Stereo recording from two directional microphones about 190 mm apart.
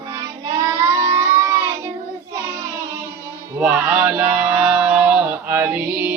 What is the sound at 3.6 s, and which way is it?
Chant, 10° right (ahead or behind).